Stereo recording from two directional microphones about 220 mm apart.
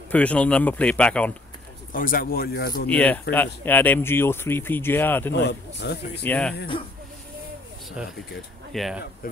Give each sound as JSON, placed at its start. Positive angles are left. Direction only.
{"t": 0.1, "sound": "speech", "side_deg": 5}
{"t": 1.9, "sound": "a man's voice", "side_deg": 40}
{"t": 2.9, "sound": "speech", "side_deg": 5}
{"t": 5.3, "sound": "a man's voice", "side_deg": 50}
{"t": 6.2, "sound": "speech", "side_deg": 5}
{"t": 8.7, "sound": "speech", "side_deg": 0}
{"t": 9.2, "sound": "speech", "side_deg": 40}